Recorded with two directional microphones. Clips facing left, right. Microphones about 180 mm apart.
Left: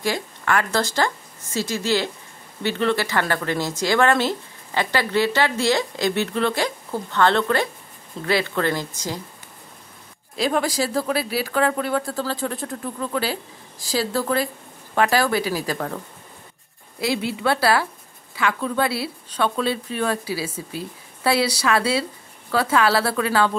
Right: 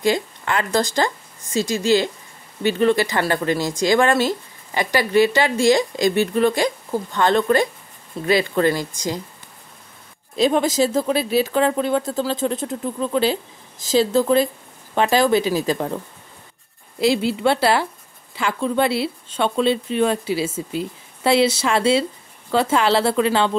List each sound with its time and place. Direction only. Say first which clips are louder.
0.0 s speech: right 5 dB; 20° right (ahead or behind)
10.3 s speech: right 4 dB; 20° right (ahead or behind)
17.0 s speech: right 5 dB; 30° right (ahead or behind)